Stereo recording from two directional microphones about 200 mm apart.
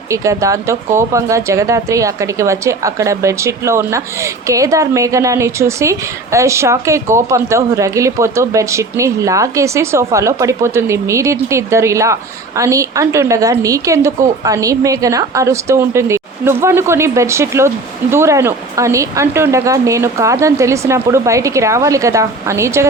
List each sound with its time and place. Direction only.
0.1 s speech: 15° right (ahead or behind)